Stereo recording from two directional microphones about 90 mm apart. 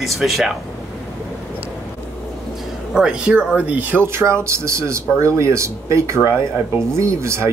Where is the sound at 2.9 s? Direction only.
10° right (ahead or behind); by 6.1 s 35° right (ahead or behind).